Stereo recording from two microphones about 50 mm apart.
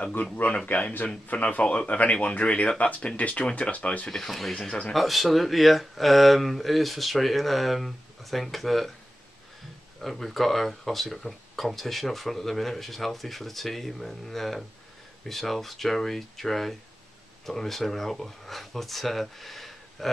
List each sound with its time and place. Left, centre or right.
0.1 s speech: left
4.1 s speech: centre
9.9 s speech: centre